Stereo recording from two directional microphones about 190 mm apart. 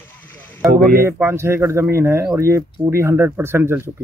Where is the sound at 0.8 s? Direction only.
45° right (ahead or behind).